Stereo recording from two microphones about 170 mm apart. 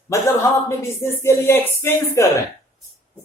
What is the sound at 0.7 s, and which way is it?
Speech, 15° left (ahead or behind).